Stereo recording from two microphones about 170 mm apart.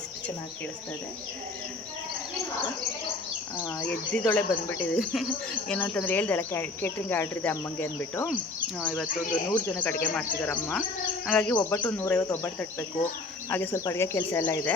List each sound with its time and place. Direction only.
3.6 s speech: 10° left (ahead or behind)
9.3 s speech: 10° left (ahead or behind)
11.5 s speech: 20° left (ahead or behind)